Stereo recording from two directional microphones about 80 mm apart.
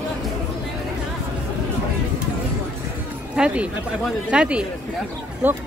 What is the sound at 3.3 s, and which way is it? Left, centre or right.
Speech, centre.